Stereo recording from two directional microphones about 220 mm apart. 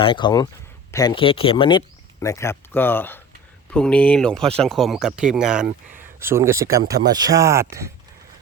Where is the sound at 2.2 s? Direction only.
15° left (ahead or behind); by 7.9 s 15° right (ahead or behind).